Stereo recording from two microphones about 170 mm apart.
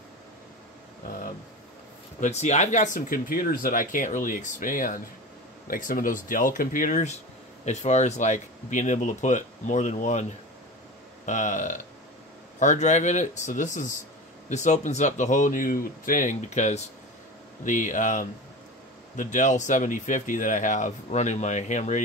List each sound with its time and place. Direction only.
2.1 s speech: 45° left (ahead or behind)
11.2 s speech: 45° left (ahead or behind)